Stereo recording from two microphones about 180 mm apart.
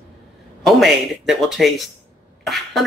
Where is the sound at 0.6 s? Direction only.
Centre (ahead or behind).